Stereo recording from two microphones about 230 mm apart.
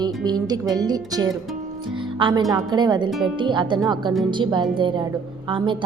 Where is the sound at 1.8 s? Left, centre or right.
Right.